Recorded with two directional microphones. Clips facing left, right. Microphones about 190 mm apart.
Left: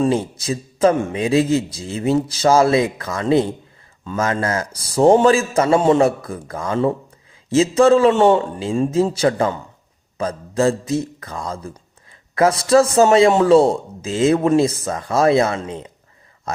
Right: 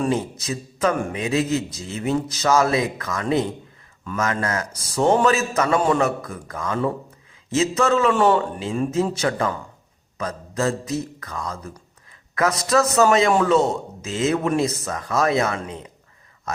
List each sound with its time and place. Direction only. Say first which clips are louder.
0.0 s a man's voice: left 4 dB; 30° left (ahead or behind)